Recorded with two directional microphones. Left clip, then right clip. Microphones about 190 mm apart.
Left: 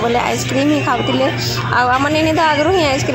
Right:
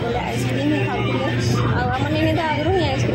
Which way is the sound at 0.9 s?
25° left (ahead or behind).